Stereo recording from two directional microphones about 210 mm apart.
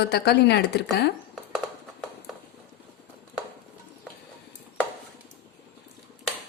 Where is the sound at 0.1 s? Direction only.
50° left (ahead or behind).